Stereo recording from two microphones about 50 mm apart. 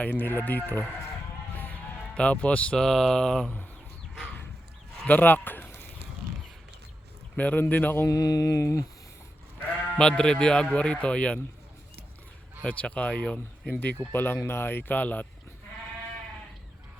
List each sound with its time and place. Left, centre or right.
0.0 s speech: left
1.5 s music: left
2.1 s speech: left
2.7 s speech: centre
5.0 s speech: left
7.3 s speech: left
8.0 s mantra: left
10.0 s speech: centre
12.6 s speech: left
14.1 s speech: left